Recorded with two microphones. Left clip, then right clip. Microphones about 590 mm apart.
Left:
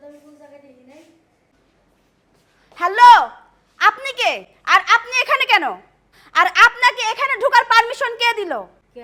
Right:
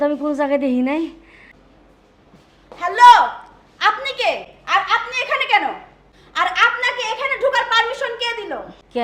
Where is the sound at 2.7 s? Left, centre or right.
Left.